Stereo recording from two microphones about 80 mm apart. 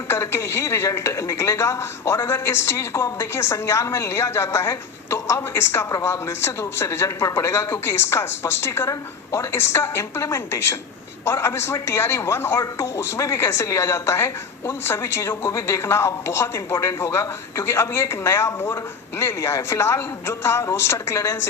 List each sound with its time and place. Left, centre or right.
0.1 s speech: left
9.5 s speech: left